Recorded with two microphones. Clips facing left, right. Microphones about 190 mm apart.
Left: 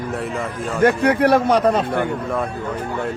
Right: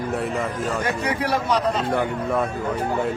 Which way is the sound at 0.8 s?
55° left (ahead or behind).